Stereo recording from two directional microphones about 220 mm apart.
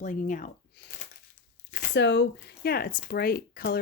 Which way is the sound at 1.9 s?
50° left (ahead or behind).